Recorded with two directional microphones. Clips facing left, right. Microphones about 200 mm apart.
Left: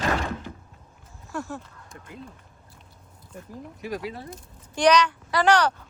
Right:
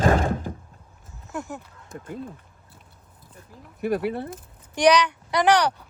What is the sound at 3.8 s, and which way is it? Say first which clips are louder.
Speech: right 8 dB; 60° right (ahead or behind).